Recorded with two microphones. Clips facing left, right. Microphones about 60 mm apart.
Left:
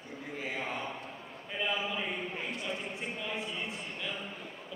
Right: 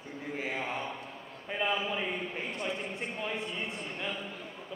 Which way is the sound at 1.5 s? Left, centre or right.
Right.